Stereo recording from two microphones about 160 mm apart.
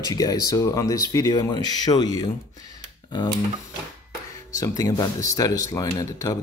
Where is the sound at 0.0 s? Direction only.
25° left (ahead or behind).